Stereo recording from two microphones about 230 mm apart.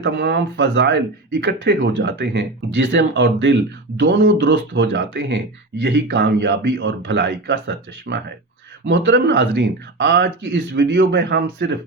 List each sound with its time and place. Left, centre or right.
0.0 s speech: right